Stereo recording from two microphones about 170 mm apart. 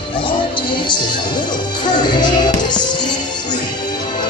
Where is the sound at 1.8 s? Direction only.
25° left (ahead or behind).